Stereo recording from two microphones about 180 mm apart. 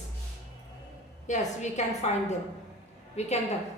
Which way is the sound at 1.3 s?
40° left (ahead or behind).